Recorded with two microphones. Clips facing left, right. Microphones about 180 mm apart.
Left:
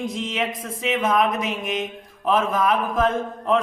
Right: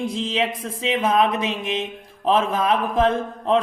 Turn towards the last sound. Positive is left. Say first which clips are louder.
# right 1 dB
turn(degrees=-30)  # may be behind; listen again after turning